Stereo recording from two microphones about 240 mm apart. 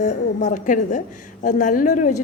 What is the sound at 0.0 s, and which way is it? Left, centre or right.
Speech, left.